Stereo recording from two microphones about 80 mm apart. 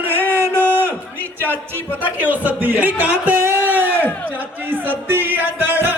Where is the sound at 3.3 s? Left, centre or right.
Right.